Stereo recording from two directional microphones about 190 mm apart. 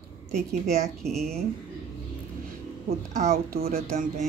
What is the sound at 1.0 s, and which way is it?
Speech, centre (ahead or behind).